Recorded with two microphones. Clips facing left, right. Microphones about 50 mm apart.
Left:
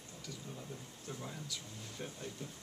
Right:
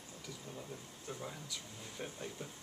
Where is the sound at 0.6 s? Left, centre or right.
Centre.